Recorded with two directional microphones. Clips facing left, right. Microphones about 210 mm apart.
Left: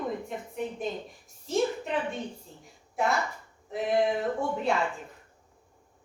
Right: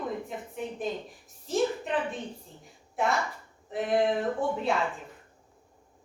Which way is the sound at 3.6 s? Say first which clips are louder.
Even; centre (ahead or behind).